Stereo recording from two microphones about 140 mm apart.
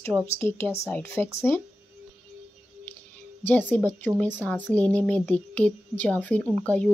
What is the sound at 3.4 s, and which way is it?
Speech, 15° left (ahead or behind).